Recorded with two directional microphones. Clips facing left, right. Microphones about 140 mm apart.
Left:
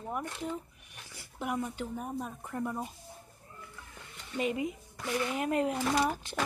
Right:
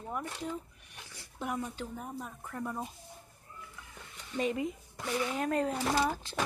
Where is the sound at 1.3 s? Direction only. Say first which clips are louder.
Left 2 dB; 10° left (ahead or behind).